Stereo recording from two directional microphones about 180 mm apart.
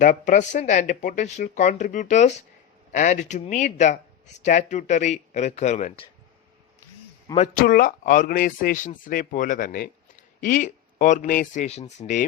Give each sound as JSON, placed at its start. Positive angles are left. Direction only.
{"t": 0.0, "sound": "speech", "side_deg": 45}
{"t": 7.5, "sound": "speech", "side_deg": 50}